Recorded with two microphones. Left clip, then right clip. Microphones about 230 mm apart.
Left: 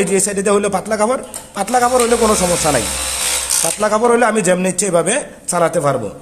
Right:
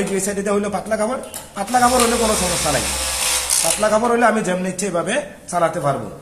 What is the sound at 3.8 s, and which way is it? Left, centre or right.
A man's voice, left.